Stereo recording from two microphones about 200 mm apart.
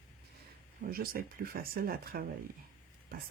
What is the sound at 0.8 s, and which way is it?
Speech, 50° right (ahead or behind).